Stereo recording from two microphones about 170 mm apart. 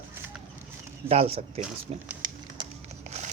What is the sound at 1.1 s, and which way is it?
Speech, 35° right (ahead or behind).